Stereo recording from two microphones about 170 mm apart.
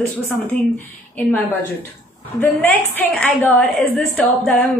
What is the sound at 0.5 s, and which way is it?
Speech, 55° left (ahead or behind).